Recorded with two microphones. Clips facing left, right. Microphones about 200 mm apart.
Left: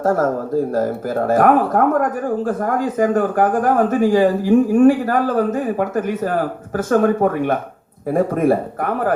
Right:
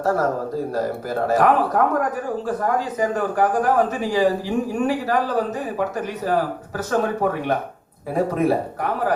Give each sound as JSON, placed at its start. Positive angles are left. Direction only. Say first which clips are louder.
{"t": 0.0, "sound": "speech", "louder": "left 3 dB", "side_deg": 50}